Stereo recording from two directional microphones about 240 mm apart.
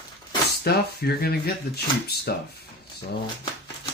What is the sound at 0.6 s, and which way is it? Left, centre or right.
Speech, left.